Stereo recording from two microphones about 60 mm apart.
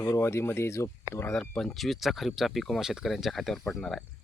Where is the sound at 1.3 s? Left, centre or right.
Centre.